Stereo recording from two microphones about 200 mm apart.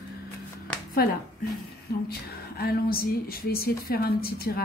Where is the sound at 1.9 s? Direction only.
50° left (ahead or behind).